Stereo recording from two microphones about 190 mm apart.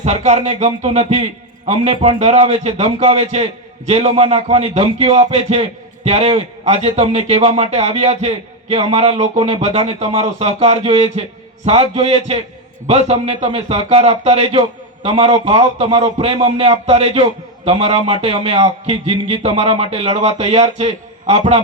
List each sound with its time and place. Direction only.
0.0 s a man's voice: 35° right (ahead or behind)